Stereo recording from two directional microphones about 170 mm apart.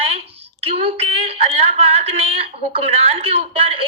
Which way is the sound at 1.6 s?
40° right (ahead or behind).